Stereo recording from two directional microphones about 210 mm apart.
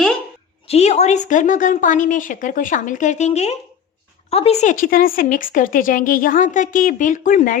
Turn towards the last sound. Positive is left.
turn(degrees=40)  # may be behind; listen again after turning